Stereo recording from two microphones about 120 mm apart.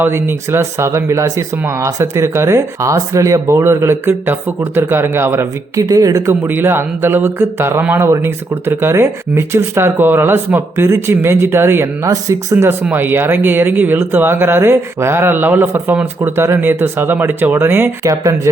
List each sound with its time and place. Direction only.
0.0 s speech: 20° right (ahead or behind)